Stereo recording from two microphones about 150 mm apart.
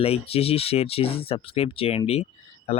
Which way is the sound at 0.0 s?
40° left (ahead or behind).